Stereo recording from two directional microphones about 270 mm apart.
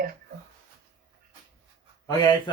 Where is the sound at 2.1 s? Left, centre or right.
Centre.